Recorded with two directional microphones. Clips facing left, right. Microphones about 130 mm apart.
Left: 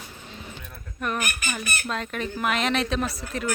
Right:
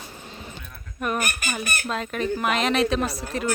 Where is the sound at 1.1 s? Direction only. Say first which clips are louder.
Right 2 dB; 40° right (ahead or behind).